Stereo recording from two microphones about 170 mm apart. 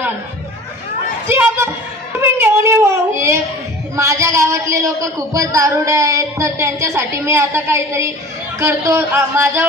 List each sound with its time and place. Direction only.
1.3 s a sound: 15° right (ahead or behind)
2.1 s child singing: 15° right (ahead or behind)
3.9 s speech: 15° right (ahead or behind)